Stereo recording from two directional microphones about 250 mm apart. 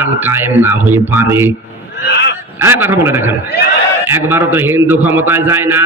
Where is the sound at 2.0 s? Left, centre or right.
Left.